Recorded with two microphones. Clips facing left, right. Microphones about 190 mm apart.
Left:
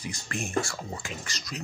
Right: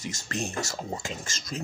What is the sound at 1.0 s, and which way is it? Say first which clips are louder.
Speech: right 2 dB; 25° right (ahead or behind).